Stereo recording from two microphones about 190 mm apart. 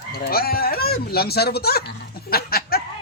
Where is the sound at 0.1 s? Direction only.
55° left (ahead or behind).